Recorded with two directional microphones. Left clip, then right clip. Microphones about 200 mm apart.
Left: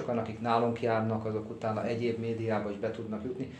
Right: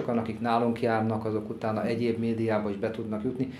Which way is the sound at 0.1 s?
35° right (ahead or behind).